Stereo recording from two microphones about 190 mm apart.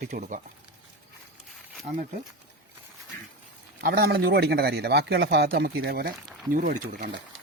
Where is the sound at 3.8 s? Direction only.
55° right (ahead or behind).